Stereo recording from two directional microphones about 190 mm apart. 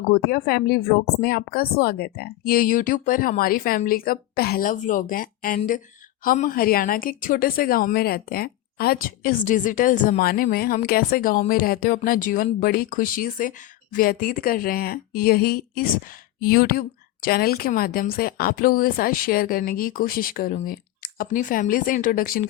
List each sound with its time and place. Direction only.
0.1 s a woman's voice: 50° left (ahead or behind)